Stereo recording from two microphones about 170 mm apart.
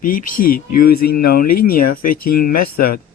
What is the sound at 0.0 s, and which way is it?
Speech, 55° left (ahead or behind).